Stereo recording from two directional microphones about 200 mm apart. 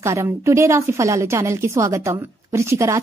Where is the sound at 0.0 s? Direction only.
15° right (ahead or behind).